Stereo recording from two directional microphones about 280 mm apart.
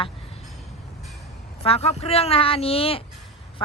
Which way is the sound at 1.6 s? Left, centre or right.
Left.